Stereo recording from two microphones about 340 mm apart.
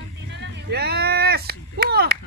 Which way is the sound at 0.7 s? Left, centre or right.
Right.